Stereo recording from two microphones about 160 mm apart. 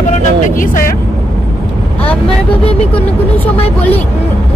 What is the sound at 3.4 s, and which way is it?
Speech, 10° left (ahead or behind).